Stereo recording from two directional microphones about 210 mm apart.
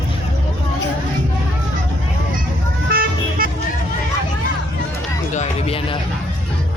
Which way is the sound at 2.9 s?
45° right (ahead or behind).